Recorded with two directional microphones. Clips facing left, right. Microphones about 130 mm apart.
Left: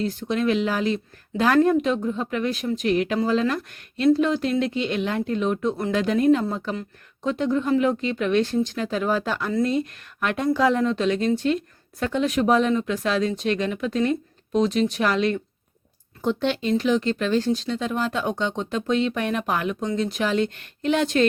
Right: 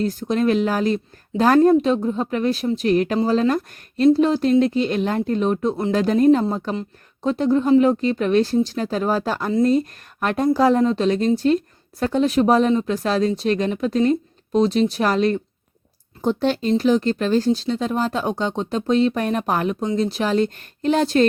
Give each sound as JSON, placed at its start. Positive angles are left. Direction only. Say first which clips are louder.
{"t": 0.0, "sound": "speech", "louder": "right 4 dB", "side_deg": -40}